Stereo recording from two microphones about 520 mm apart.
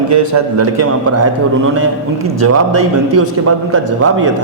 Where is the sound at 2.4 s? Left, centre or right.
Right.